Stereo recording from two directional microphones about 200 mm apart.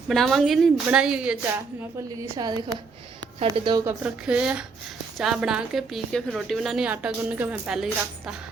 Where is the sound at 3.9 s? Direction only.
5° right (ahead or behind).